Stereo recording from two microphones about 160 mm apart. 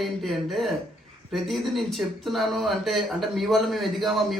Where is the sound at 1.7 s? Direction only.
Centre (ahead or behind).